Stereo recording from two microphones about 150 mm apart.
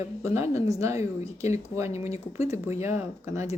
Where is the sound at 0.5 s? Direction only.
20° right (ahead or behind).